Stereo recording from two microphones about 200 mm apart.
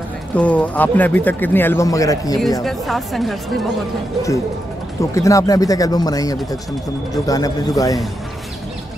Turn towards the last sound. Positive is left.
turn(degrees=20)  # may be behind; listen again after turning